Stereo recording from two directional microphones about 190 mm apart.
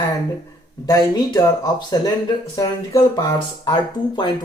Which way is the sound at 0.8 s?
20° left (ahead or behind).